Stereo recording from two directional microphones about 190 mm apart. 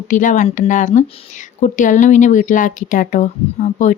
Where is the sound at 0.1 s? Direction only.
40° left (ahead or behind).